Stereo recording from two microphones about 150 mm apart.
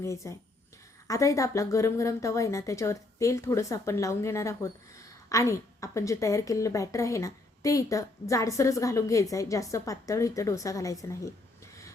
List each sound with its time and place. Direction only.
0.0 s a woman's voice: 20° left (ahead or behind)